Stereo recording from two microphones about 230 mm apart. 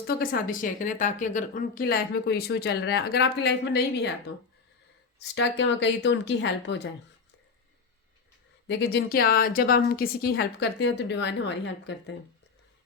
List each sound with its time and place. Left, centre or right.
0.2 s a woman's voice: left
5.3 s a woman's voice: left
8.6 s a woman's voice: left